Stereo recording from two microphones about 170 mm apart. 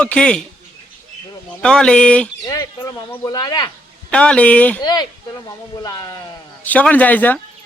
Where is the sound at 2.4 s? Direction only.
20° left (ahead or behind).